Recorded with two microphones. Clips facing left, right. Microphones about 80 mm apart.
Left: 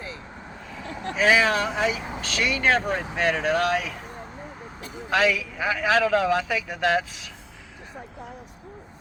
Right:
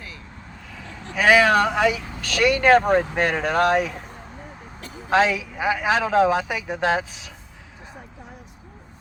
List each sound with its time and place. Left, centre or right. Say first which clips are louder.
1.1 s speech: right 4 dB; right
5.0 s speech: right 3 dB; right